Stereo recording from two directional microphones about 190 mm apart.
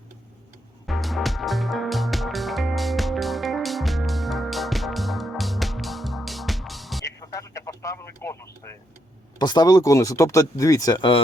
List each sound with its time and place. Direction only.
0.9 s music: centre (ahead or behind)
7.0 s a sound: 15° left (ahead or behind)
9.4 s speech: 20° left (ahead or behind)